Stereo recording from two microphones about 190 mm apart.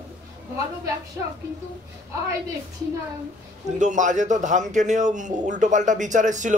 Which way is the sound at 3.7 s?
40° right (ahead or behind).